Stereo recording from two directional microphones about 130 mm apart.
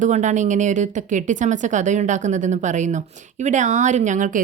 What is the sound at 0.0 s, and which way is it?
Speech, 65° right (ahead or behind).